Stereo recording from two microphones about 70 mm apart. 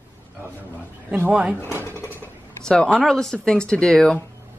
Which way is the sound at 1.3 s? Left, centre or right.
Centre.